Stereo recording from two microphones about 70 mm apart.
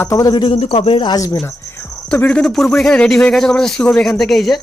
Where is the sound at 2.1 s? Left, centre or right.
Centre.